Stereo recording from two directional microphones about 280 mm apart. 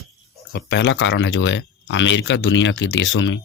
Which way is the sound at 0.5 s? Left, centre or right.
Left.